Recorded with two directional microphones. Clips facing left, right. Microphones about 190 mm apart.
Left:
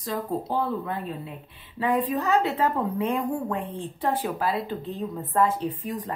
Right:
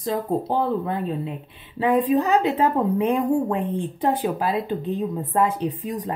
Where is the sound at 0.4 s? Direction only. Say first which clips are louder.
Right 4 dB; 25° right (ahead or behind).